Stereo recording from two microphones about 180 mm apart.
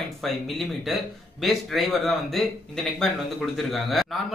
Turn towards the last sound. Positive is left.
turn(degrees=0)  # may be behind; listen again after turning